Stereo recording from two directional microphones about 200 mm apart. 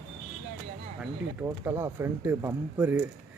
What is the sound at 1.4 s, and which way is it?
Speech, 10° right (ahead or behind).